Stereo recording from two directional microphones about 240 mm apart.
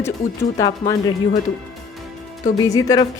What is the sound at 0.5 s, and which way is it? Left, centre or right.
Speech, centre.